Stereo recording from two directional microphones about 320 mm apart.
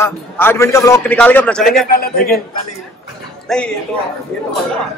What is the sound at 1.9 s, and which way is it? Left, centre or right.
Speech, left.